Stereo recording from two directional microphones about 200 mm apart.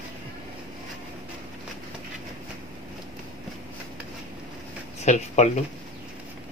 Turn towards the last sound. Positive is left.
turn(degrees=35)  # may be behind; listen again after turning